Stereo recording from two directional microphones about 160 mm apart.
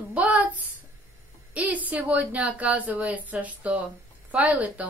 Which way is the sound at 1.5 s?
10° right (ahead or behind).